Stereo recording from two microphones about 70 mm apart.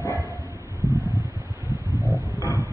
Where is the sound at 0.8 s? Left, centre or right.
Left.